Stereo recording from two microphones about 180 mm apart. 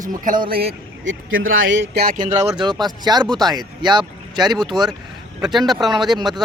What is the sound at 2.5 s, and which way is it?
Speech, 25° right (ahead or behind).